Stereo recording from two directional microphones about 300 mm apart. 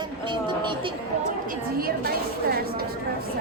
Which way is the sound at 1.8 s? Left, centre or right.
Right.